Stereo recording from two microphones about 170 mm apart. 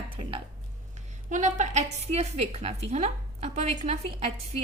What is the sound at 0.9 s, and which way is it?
A woman's voice, 45° right (ahead or behind).